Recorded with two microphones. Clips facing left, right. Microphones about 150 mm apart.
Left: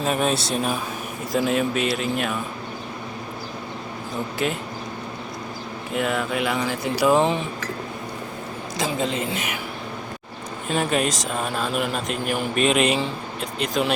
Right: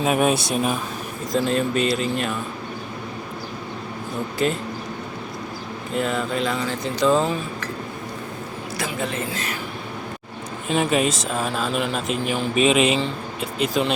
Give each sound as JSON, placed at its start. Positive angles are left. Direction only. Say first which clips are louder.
{"t": 0.0, "sound": "speech", "louder": "right 3 dB", "side_deg": -5}
{"t": 1.3, "sound": "speech", "louder": "even", "side_deg": 5}
{"t": 4.4, "sound": "speech", "louder": "right 3 dB", "side_deg": 5}
{"t": 5.9, "sound": "speech", "louder": "even", "side_deg": 5}
{"t": 8.8, "sound": "speech", "louder": "left 3 dB", "side_deg": 20}
{"t": 10.7, "sound": "speech", "louder": "right 2 dB", "side_deg": 0}